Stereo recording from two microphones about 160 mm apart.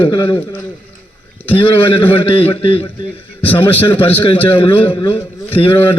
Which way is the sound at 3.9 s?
35° left (ahead or behind).